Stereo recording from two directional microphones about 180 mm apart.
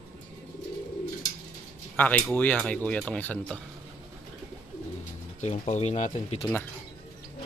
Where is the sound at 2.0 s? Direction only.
10° left (ahead or behind).